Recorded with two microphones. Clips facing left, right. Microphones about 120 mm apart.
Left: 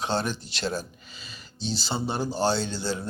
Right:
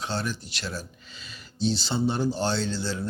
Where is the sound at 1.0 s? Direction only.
5° left (ahead or behind).